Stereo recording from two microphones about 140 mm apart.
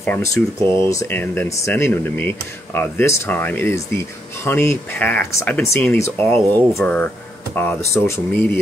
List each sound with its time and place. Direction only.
0.2 s speech: 20° left (ahead or behind)